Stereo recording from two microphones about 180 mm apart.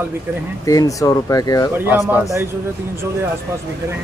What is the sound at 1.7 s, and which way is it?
Speech, 10° right (ahead or behind).